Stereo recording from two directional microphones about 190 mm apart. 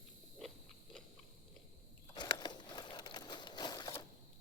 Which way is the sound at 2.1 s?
20° left (ahead or behind).